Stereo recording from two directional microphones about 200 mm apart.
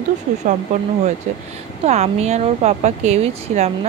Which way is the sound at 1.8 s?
35° right (ahead or behind).